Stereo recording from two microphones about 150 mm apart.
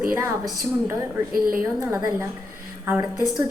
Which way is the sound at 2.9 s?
10° right (ahead or behind).